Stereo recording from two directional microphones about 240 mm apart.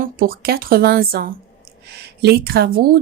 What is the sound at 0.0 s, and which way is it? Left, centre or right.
Speech, right.